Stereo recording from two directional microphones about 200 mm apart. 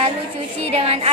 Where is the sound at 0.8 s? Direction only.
30° right (ahead or behind).